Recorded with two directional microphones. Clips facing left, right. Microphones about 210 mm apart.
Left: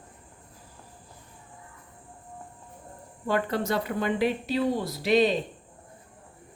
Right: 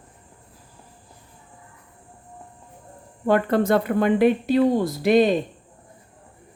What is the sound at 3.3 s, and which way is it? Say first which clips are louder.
Speech: right 8 dB; 55° right (ahead or behind).